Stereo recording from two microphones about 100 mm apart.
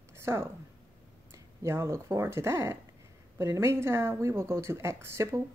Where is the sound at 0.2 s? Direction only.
25° right (ahead or behind).